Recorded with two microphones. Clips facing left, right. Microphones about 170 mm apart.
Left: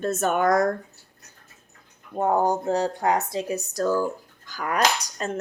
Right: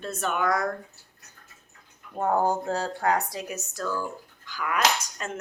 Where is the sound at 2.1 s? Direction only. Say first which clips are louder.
Left 2 dB; 15° left (ahead or behind).